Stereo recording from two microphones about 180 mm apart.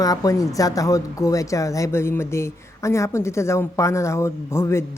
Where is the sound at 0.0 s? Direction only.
20° left (ahead or behind).